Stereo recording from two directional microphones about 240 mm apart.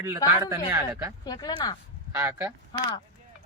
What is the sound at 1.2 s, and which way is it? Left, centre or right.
Speech, centre.